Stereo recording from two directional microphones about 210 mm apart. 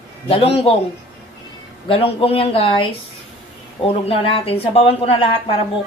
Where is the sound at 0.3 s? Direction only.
30° left (ahead or behind).